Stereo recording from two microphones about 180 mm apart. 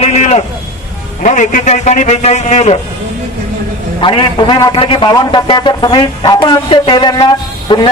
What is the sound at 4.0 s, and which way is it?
A man's voice, 25° left (ahead or behind).